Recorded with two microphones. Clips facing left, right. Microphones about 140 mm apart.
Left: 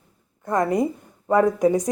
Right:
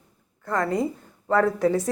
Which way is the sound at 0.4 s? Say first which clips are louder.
Left 3 dB; 20° left (ahead or behind).